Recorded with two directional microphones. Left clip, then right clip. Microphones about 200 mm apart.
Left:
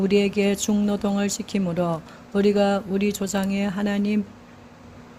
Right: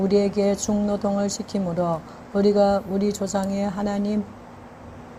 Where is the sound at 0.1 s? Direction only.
45° left (ahead or behind).